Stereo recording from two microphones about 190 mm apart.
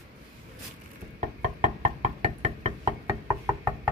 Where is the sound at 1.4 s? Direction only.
40° right (ahead or behind).